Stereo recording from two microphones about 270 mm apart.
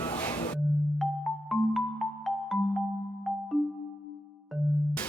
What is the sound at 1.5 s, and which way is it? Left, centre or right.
Music, centre.